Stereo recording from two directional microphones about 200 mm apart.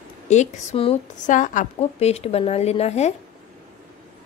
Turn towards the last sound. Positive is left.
turn(degrees=35)  # may be behind; listen again after turning